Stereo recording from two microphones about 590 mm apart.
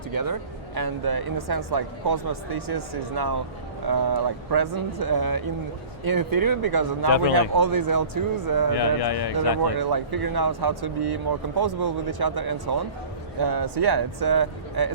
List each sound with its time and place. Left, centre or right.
0.1 s speech: right
8.7 s speech: left
9.7 s speech: right